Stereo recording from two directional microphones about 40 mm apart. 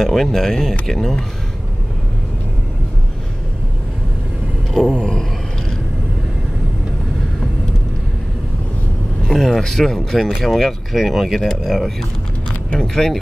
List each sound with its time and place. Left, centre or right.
0.0 s speech: centre
4.9 s speech: centre
9.3 s speech: centre
10.4 s speech: centre
12.7 s speech: centre